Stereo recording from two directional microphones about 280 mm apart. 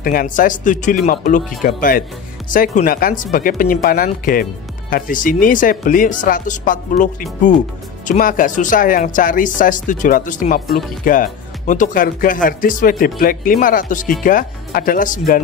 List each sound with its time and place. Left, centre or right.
0.0 s speech: left